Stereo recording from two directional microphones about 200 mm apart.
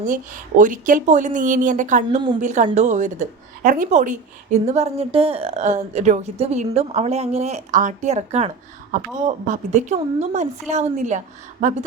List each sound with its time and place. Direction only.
0.0 s a woman's voice: 40° right (ahead or behind)
2.0 s a woman's voice: 25° right (ahead or behind)
2.4 s a woman's voice: 35° right (ahead or behind)